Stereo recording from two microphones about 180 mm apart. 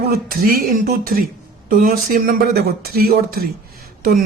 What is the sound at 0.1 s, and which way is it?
Speech, 55° right (ahead or behind).